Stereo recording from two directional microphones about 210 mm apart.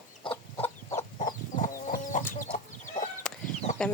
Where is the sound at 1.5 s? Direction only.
40° left (ahead or behind).